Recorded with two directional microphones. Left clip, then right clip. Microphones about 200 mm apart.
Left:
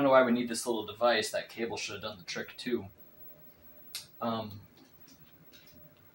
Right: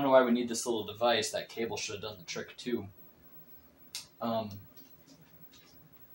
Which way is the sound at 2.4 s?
25° left (ahead or behind).